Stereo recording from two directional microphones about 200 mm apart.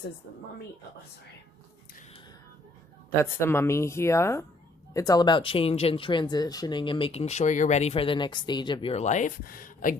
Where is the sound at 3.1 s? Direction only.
10° left (ahead or behind).